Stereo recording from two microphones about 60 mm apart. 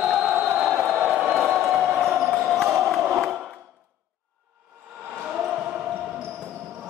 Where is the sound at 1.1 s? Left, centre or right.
Centre.